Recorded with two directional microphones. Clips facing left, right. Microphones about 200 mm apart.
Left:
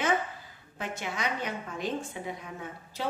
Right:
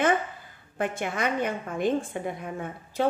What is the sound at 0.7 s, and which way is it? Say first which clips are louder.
A woman's voice: right 7 dB; 55° right (ahead or behind).